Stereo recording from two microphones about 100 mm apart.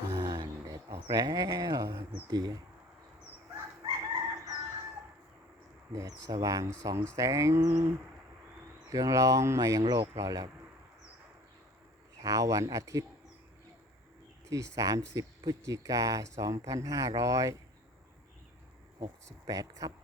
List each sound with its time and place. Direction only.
0.2 s a sound: 45° right (ahead or behind)
1.1 s speech: 40° right (ahead or behind)
3.8 s chicken: 60° right (ahead or behind)
5.9 s speech: 35° right (ahead or behind)
8.9 s speech: 35° right (ahead or behind)
12.2 s speech: 35° right (ahead or behind)
14.5 s speech: 35° right (ahead or behind)
18.9 s speech: 40° right (ahead or behind)